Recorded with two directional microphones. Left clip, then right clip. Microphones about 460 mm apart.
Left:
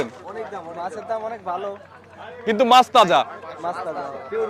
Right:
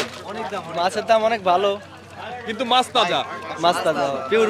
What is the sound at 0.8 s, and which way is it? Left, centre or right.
Speech, right.